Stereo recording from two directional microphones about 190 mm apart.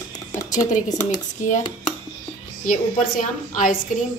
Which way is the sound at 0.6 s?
40° left (ahead or behind).